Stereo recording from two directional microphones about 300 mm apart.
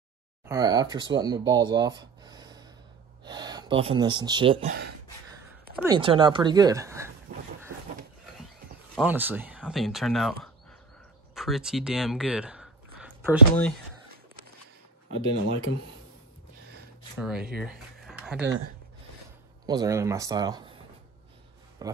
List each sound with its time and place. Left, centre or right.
0.5 s speech: centre
5.8 s a woman's voice: centre
7.3 s a sound: right
8.9 s speech: centre
11.3 s speech: centre
15.4 s speech: left
17.2 s speech: centre
17.6 s a sound: centre
19.6 s speech: centre